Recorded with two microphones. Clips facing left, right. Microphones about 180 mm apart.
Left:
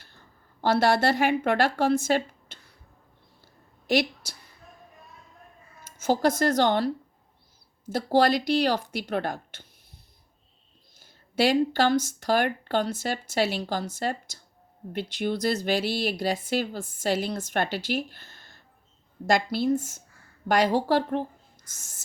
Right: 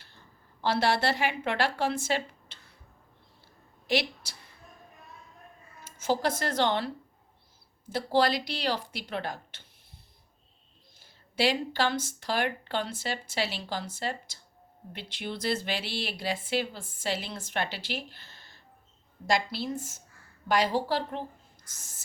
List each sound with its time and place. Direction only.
0.6 s speech: 45° left (ahead or behind)
3.8 s a woman's voice: 45° left (ahead or behind)
6.0 s speech: 45° left (ahead or behind)
11.3 s speech: 45° left (ahead or behind)